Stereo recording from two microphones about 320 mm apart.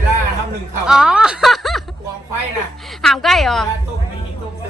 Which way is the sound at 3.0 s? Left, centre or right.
Centre.